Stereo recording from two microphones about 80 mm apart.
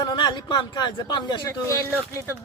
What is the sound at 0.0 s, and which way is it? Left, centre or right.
Speech, left.